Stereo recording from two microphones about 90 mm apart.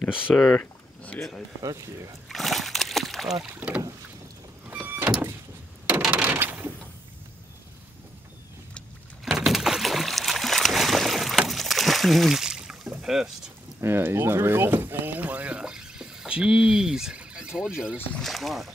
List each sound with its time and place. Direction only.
0.1 s speech: 10° right (ahead or behind)
0.6 s a sound: 15° left (ahead or behind)
1.6 s speech: 35° right (ahead or behind)
2.2 s splash: centre (ahead or behind)
3.5 s speech: 15° right (ahead or behind)
4.6 s vehicle: 20° right (ahead or behind)
6.1 s a sound: 25° right (ahead or behind)
9.2 s boat: centre (ahead or behind)
13.7 s speech: 25° right (ahead or behind); by 18.7 s centre (ahead or behind)